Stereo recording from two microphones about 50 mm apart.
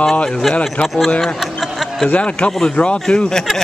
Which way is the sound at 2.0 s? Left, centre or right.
Left.